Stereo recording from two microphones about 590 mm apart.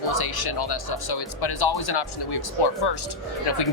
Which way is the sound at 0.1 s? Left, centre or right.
Left.